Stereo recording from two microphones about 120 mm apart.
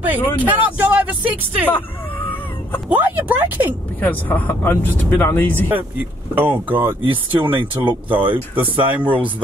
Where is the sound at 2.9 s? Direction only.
15° right (ahead or behind).